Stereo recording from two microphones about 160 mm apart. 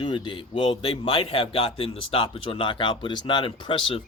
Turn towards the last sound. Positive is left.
turn(degrees=35)  # may be behind; listen again after turning